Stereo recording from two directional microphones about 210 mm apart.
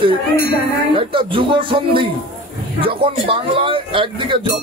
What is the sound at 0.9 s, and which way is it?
Speech, 25° right (ahead or behind).